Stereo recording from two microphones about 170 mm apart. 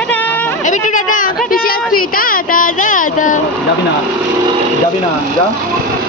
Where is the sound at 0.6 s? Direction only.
50° left (ahead or behind).